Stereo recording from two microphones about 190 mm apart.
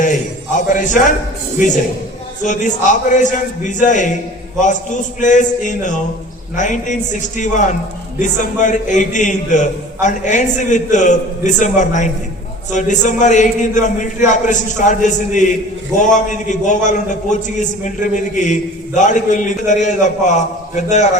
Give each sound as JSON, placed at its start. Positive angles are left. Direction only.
{"t": 0.5, "sound": "a man's voice", "side_deg": 45}
{"t": 5.2, "sound": "a man's voice", "side_deg": 40}